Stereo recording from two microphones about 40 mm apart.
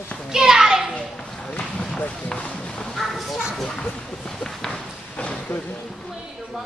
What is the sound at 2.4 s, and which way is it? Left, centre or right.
Speech, left.